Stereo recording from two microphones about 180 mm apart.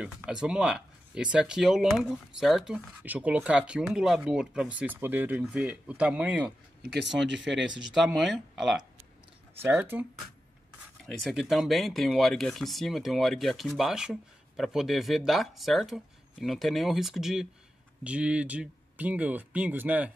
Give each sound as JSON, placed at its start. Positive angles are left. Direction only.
{"t": 0.0, "sound": "speech", "side_deg": -5}
{"t": 6.9, "sound": "speech", "side_deg": -75}
{"t": 7.2, "sound": "speech", "side_deg": -90}
{"t": 7.9, "sound": "speech", "side_deg": 0}
{"t": 9.6, "sound": "speech", "side_deg": -10}
{"t": 11.1, "sound": "speech", "side_deg": 0}